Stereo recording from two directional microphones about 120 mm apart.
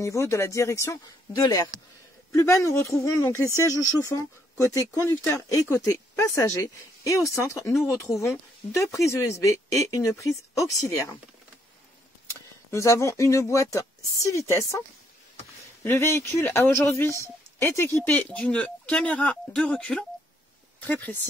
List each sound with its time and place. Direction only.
0.0 s speech: 25° left (ahead or behind)
12.7 s speech: 25° left (ahead or behind)
15.8 s speech: 20° left (ahead or behind)